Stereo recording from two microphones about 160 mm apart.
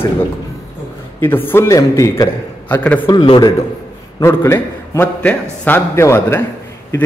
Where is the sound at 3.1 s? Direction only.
25° left (ahead or behind).